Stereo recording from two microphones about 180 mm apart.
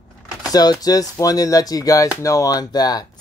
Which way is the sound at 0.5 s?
20° left (ahead or behind).